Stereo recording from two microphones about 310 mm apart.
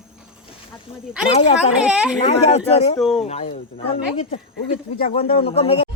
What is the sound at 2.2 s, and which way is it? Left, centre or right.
Speech, centre.